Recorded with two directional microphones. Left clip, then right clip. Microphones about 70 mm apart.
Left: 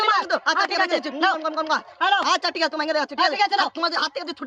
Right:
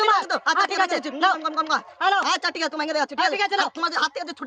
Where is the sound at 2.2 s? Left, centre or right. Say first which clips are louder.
Left 2 dB; right.